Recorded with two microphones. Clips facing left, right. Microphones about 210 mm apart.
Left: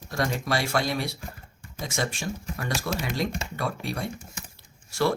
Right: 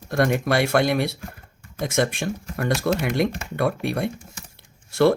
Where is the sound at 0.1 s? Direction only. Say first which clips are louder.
Right 7 dB; 60° right (ahead or behind).